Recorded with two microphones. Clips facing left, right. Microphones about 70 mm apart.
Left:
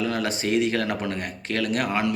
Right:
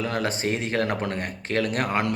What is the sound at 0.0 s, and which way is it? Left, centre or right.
Speech, right.